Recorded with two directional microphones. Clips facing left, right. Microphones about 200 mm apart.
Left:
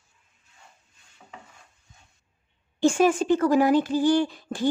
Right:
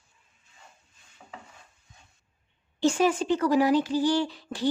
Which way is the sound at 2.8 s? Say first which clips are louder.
Left 3 dB; 50° left (ahead or behind).